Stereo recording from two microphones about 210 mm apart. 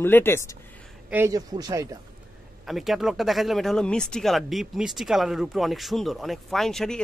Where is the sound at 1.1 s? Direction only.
15° right (ahead or behind).